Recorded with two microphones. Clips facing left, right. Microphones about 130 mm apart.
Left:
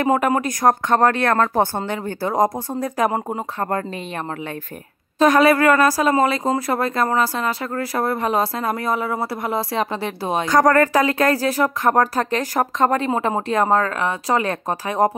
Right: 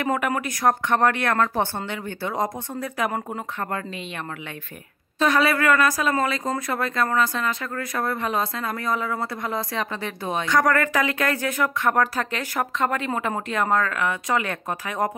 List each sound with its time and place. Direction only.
0.0 s speech: 30° left (ahead or behind)
5.2 s speech: 40° left (ahead or behind)